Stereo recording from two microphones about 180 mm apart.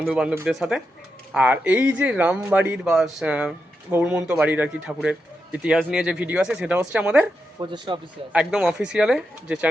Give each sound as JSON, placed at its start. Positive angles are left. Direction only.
{"t": 0.0, "sound": "a man's voice", "side_deg": -5}
{"t": 7.6, "sound": "a man's voice", "side_deg": -25}
{"t": 8.3, "sound": "speech", "side_deg": -5}